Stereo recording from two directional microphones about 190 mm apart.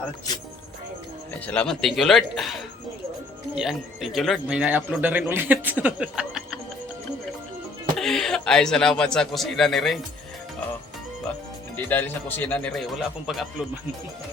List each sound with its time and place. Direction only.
0.3 s speech: 20° left (ahead or behind)
1.5 s speech: 5° left (ahead or behind)
7.9 s speech: centre (ahead or behind)
11.9 s a man's voice: 10° left (ahead or behind)